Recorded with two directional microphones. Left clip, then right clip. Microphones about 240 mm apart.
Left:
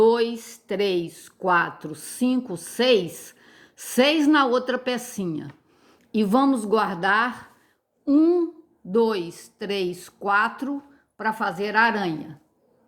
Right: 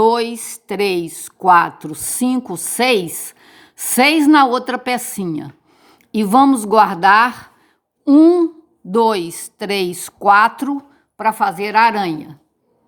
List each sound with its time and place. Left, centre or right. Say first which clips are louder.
0.0 s a woman's voice: right 4 dB; right